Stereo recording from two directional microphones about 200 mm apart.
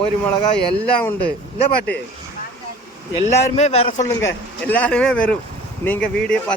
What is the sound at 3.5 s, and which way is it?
Speech, 30° left (ahead or behind).